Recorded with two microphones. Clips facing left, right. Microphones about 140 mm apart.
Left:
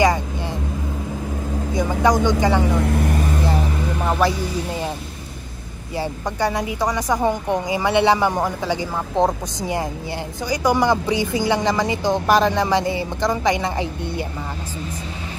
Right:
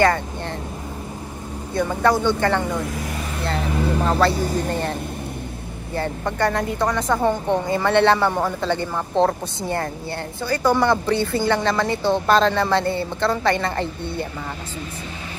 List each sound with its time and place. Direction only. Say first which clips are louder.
1.7 s a woman's voice: even; 15° left (ahead or behind)
2.7 s speech: left 6 dB; 60° left (ahead or behind)
3.4 s vehicle: even; 10° left (ahead or behind)
4.3 s speech: right 2 dB; 40° right (ahead or behind)
4.6 s a woman's voice: right 2 dB; 10° left (ahead or behind)
5.9 s a woman's voice: even; 10° left (ahead or behind)